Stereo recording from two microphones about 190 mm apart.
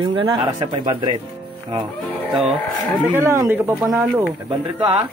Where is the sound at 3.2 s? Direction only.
15° right (ahead or behind).